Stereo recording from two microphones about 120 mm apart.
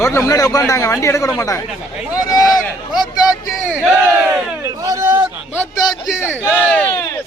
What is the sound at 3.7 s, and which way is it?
Battle cry, 10° right (ahead or behind).